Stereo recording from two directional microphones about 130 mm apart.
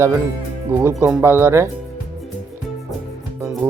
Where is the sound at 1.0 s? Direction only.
20° right (ahead or behind).